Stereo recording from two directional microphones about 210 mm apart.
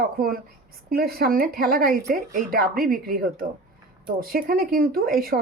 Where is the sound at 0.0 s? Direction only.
45° right (ahead or behind).